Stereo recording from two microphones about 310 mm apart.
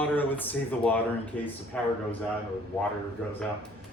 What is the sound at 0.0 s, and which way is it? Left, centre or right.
Speech, centre.